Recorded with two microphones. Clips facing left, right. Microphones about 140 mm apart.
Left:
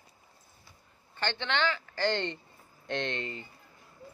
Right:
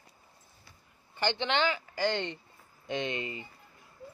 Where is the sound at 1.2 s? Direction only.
15° right (ahead or behind).